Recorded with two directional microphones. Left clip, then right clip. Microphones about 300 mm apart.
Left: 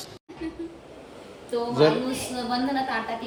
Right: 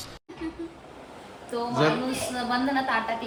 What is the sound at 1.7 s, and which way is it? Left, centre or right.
Speech, centre.